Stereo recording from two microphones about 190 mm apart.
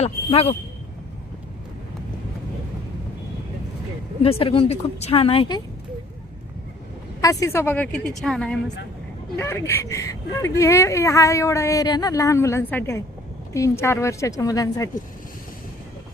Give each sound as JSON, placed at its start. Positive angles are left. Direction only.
{"t": 0.0, "sound": "speech", "side_deg": 30}
{"t": 4.2, "sound": "a woman's voice", "side_deg": 30}
{"t": 7.2, "sound": "speech", "side_deg": 15}